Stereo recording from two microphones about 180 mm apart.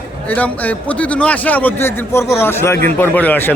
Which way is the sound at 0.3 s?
10° left (ahead or behind).